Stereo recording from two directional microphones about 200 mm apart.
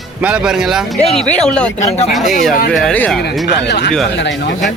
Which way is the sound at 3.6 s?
60° left (ahead or behind).